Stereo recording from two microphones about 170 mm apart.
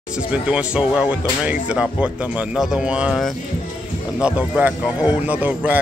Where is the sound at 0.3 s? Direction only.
5° right (ahead or behind).